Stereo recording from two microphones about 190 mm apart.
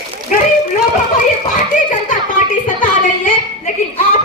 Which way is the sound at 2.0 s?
45° left (ahead or behind).